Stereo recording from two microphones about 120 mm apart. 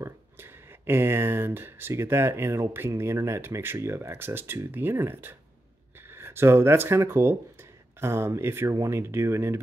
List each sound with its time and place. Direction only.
0.0 s speech: 20° right (ahead or behind)